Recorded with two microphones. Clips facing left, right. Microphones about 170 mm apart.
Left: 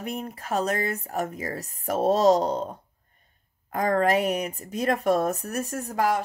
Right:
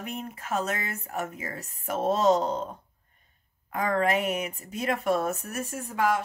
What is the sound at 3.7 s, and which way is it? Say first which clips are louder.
Speech: left 3 dB; 40° left (ahead or behind).